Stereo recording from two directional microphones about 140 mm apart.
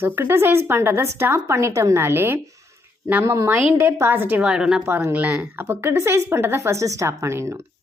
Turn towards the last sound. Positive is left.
turn(degrees=-20)  # may be behind; listen again after turning